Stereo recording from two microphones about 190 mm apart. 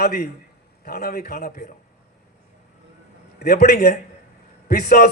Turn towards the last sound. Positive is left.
turn(degrees=55)  # may be behind; listen again after turning